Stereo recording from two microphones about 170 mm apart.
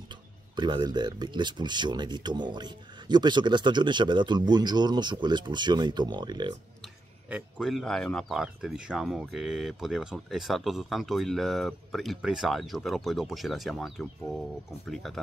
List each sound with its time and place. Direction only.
0.6 s speech: 25° right (ahead or behind)
7.5 s speech: centre (ahead or behind)